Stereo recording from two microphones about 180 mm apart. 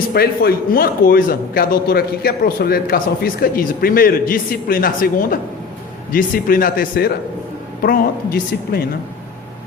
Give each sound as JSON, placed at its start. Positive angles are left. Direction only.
{"t": 0.1, "sound": "a man's voice", "side_deg": 60}